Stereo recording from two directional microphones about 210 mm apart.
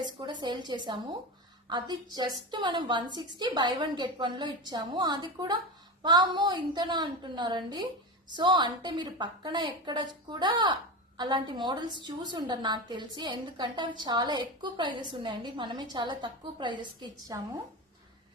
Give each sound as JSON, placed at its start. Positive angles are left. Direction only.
{"t": 0.0, "sound": "a woman's voice", "side_deg": -20}